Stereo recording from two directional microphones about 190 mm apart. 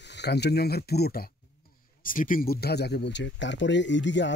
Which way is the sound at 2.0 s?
45° left (ahead or behind).